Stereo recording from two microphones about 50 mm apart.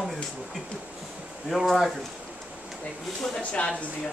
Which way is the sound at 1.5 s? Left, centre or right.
Centre.